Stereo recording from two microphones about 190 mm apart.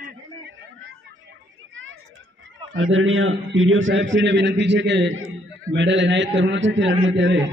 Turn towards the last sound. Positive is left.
turn(degrees=-70)  # may be behind; listen again after turning